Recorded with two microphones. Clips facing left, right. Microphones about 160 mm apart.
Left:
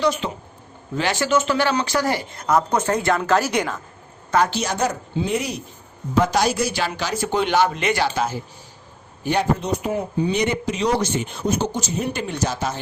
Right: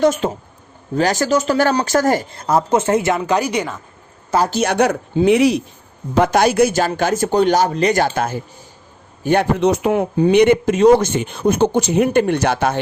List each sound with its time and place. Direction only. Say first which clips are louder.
0.0 s speech: right 6 dB; 45° right (ahead or behind)
2.4 s speech: right 1 dB; 30° right (ahead or behind); by 3.8 s 10° right (ahead or behind)
4.3 s a woman's voice: right 2 dB; 30° right (ahead or behind)
4.5 s speech: right 7 dB; 65° right (ahead or behind)
6.1 s speech: right 6 dB; 60° right (ahead or behind)
9.6 s speech: right 8 dB; 85° right; by 12.8 s 60° right (ahead or behind)